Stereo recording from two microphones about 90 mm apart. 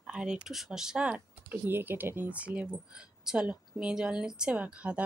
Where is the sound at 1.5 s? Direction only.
25° right (ahead or behind).